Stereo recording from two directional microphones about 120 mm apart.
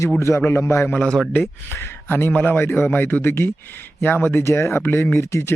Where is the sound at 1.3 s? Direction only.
20° left (ahead or behind).